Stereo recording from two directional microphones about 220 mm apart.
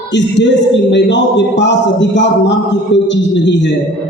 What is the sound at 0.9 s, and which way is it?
Speech, 55° left (ahead or behind).